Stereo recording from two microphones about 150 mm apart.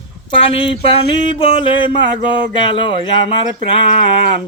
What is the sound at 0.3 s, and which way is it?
Speech, 35° left (ahead or behind).